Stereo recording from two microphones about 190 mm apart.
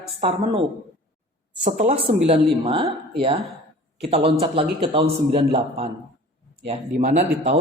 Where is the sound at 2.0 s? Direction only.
30° right (ahead or behind).